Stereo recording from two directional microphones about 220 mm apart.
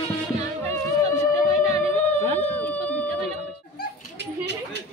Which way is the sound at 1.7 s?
30° right (ahead or behind).